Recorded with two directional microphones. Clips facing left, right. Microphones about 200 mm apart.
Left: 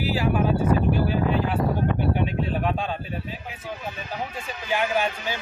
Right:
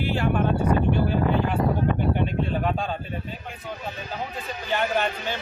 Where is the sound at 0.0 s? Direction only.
5° left (ahead or behind).